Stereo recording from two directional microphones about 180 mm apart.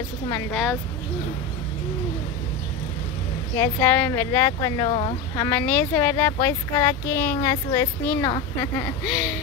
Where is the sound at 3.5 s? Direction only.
10° left (ahead or behind); by 5.4 s 30° left (ahead or behind).